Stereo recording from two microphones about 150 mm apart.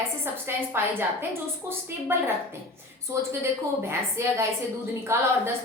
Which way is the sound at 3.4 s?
20° right (ahead or behind).